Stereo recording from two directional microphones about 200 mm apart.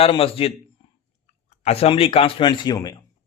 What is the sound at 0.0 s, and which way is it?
Speech, 30° left (ahead or behind).